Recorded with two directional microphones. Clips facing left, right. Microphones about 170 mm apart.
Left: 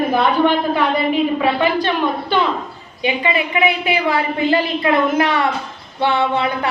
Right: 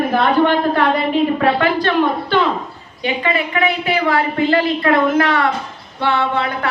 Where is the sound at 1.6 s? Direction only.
15° left (ahead or behind).